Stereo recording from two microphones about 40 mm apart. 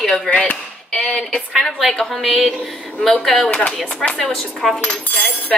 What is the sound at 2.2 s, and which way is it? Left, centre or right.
A woman's voice, centre.